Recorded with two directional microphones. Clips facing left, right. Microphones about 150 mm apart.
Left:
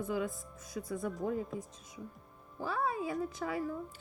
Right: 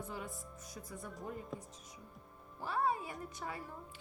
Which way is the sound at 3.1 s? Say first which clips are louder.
Left 9 dB; 90° left.